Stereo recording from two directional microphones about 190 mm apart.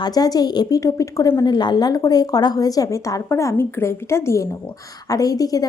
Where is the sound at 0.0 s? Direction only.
20° left (ahead or behind).